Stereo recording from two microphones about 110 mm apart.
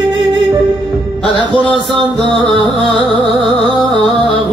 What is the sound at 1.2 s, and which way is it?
Music, 10° left (ahead or behind).